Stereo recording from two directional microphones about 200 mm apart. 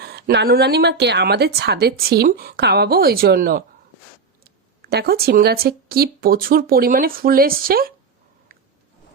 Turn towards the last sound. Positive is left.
turn(degrees=-45)  # may be behind; listen again after turning